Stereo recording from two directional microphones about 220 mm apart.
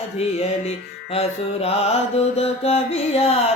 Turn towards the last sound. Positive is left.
turn(degrees=30)  # may be behind; listen again after turning